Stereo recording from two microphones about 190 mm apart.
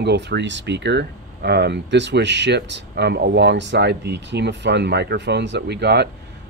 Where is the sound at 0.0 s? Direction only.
65° right (ahead or behind).